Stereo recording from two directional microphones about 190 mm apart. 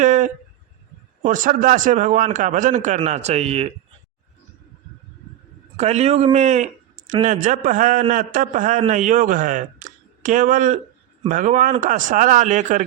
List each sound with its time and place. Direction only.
0.0 s a sound: 40° right (ahead or behind)
1.2 s a man's voice: 45° right (ahead or behind)
5.7 s a man's voice: 35° right (ahead or behind)